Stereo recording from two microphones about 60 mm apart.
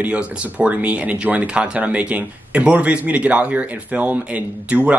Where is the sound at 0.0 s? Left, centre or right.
Right.